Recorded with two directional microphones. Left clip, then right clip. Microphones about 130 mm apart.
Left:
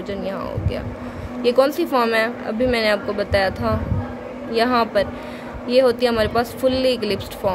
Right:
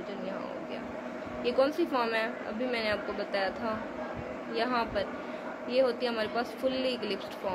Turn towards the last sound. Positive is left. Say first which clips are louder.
# left 12 dB
turn(degrees=70)  # may be behind; listen again after turning